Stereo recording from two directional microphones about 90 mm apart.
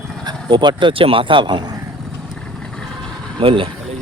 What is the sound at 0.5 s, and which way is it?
Speech, 60° right (ahead or behind).